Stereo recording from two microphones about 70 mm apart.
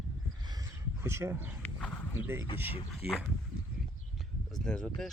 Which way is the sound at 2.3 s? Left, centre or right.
Right.